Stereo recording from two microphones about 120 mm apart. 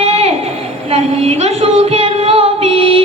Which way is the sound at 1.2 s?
55° right (ahead or behind).